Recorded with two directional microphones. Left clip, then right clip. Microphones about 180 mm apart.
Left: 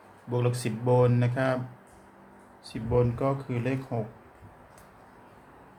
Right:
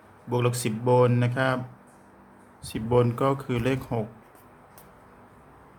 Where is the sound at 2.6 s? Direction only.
35° right (ahead or behind).